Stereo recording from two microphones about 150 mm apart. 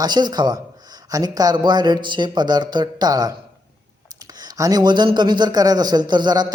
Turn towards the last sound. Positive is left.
turn(degrees=-30)  # may be behind; listen again after turning